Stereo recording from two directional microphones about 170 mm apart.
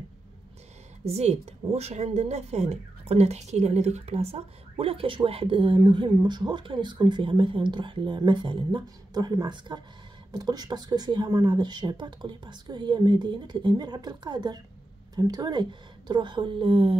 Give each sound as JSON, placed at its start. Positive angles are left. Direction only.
{"t": 1.0, "sound": "a woman's voice", "side_deg": -40}